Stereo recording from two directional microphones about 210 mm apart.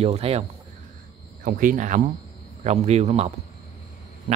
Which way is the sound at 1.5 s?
40° right (ahead or behind).